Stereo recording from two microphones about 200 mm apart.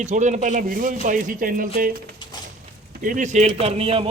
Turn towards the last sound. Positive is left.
turn(degrees=-25)  # may be behind; listen again after turning